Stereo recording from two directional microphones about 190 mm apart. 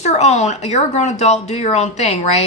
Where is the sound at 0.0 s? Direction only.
35° left (ahead or behind).